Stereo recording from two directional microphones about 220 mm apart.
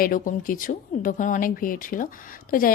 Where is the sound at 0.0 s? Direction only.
40° left (ahead or behind).